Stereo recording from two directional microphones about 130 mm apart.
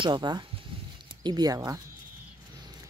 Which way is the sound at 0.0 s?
35° right (ahead or behind).